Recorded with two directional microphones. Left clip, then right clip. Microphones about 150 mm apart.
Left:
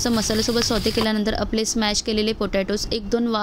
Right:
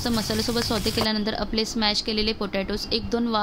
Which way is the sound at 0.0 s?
35° left (ahead or behind).